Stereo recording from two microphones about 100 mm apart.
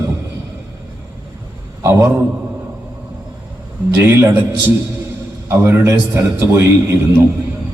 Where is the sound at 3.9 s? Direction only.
25° right (ahead or behind).